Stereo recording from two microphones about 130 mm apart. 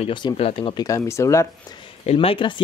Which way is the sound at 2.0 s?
45° left (ahead or behind).